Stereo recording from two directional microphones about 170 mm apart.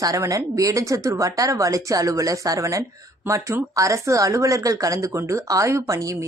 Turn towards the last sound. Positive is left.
turn(degrees=-20)  # may be behind; listen again after turning